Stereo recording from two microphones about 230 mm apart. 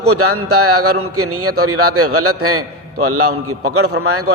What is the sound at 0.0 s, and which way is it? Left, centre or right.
A man's voice, right.